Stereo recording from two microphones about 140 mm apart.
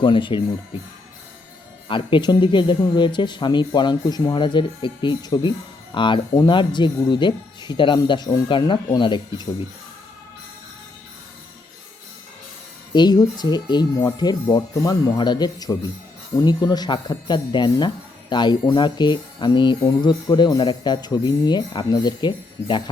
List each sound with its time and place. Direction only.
0.0 s speech: 35° left (ahead or behind)
1.9 s speech: 35° left (ahead or behind)
12.9 s speech: 30° left (ahead or behind)